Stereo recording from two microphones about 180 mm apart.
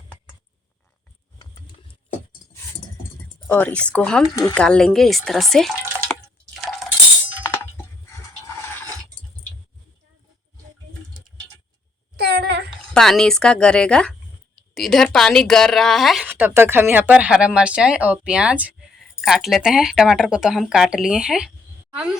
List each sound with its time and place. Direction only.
3.4 s speech: 10° left (ahead or behind)
6.6 s coin: centre (ahead or behind)
12.1 s a sound: 60° right (ahead or behind)
12.9 s speech: 5° left (ahead or behind)